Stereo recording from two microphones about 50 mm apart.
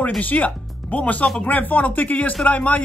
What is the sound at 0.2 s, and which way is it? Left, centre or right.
Speech, left.